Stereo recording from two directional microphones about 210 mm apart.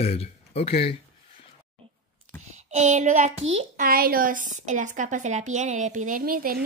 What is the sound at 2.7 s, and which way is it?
A child's voice, 35° right (ahead or behind).